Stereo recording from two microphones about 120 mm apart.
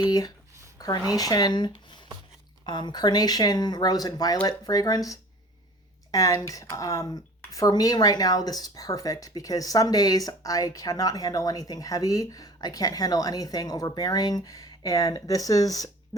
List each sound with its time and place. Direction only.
0.0 s speech: 35° left (ahead or behind)